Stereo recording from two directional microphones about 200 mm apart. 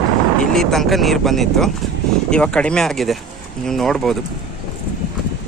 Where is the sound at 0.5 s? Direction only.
Centre (ahead or behind).